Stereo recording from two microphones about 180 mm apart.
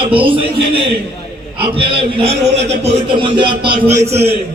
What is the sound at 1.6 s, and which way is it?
Speech, 30° right (ahead or behind).